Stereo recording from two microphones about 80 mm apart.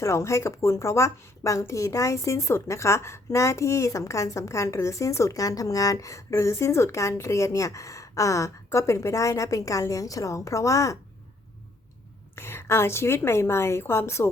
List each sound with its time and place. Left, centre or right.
0.0 s speech: left
12.4 s speech: left